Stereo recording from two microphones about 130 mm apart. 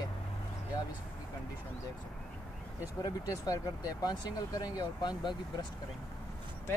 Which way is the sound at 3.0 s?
30° left (ahead or behind).